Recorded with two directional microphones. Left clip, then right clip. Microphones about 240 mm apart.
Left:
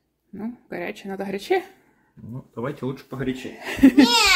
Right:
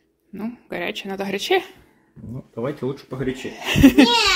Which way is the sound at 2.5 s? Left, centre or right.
Centre.